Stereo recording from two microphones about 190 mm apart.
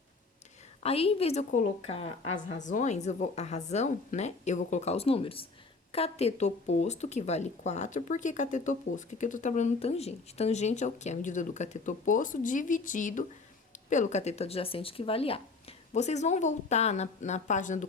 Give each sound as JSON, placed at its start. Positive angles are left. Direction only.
{"t": 0.8, "sound": "speech", "side_deg": 30}